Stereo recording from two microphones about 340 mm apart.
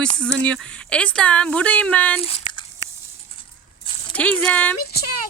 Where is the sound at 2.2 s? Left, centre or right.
Centre.